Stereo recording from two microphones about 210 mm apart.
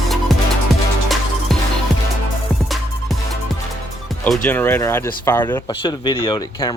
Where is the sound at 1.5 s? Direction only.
Centre (ahead or behind).